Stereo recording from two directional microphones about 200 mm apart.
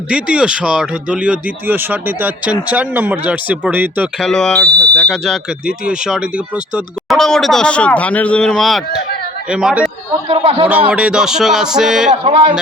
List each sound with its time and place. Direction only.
0.1 s speech: 5° right (ahead or behind)
10.2 s speech: 30° right (ahead or behind)
10.7 s speech: 5° right (ahead or behind)
12.2 s speech: 30° right (ahead or behind)